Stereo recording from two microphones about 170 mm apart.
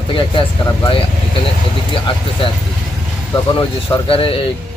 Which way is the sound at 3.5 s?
30° left (ahead or behind).